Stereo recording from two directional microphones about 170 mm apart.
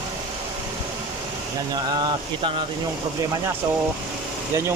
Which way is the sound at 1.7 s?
25° right (ahead or behind).